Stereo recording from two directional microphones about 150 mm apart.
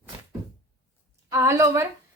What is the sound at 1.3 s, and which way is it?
Speech, 20° right (ahead or behind).